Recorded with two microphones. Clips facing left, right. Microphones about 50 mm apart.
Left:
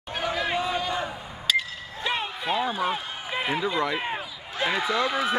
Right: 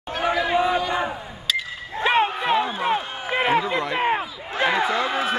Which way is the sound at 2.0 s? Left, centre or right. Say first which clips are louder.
Right 8 dB; right.